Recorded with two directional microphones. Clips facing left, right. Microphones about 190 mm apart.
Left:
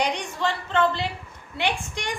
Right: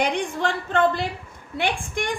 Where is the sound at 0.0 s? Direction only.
55° right (ahead or behind).